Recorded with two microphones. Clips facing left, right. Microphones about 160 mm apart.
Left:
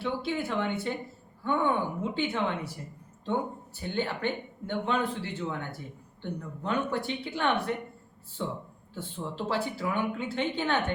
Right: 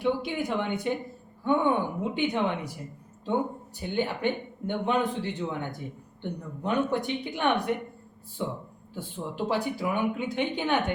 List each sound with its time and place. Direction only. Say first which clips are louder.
0.0 s speech: right 3 dB; 15° right (ahead or behind)
3.8 s speech: right 2 dB; 15° right (ahead or behind)